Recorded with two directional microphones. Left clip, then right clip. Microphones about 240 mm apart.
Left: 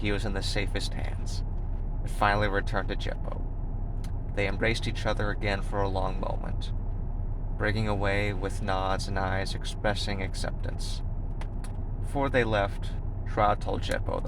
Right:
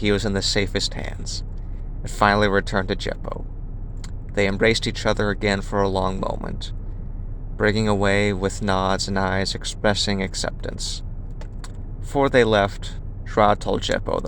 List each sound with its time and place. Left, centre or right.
0.0 s speech: right
4.4 s speech: right
12.1 s speech: right